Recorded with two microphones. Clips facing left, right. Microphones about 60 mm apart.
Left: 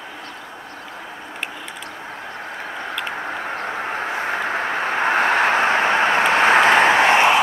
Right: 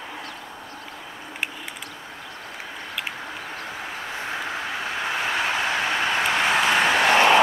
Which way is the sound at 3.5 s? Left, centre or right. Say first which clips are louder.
Left 8 dB; left.